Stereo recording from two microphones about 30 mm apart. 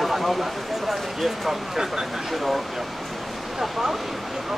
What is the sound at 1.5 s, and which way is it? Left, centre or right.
Speech, centre.